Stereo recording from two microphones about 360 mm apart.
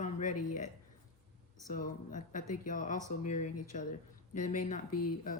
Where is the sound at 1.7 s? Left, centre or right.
Left.